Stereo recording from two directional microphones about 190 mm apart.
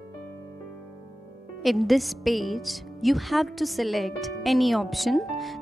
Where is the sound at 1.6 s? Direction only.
Centre (ahead or behind).